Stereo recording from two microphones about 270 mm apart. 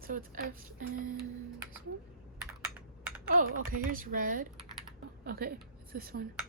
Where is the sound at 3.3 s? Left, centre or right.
Right.